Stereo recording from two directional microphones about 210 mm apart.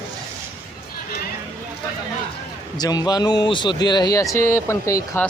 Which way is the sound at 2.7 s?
20° left (ahead or behind).